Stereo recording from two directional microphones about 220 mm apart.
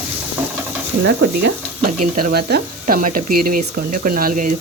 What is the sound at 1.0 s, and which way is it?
Speech, 50° right (ahead or behind).